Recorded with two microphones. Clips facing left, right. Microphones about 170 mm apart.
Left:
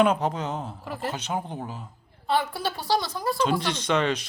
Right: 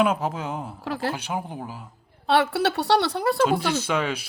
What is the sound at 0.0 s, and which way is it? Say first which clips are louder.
Speech: left 1 dB; 5° right (ahead or behind).